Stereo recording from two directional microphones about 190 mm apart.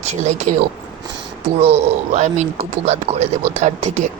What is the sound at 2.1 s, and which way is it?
Speech, 35° right (ahead or behind).